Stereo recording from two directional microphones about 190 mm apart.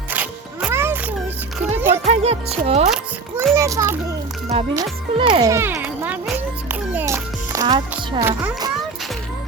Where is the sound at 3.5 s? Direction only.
15° right (ahead or behind).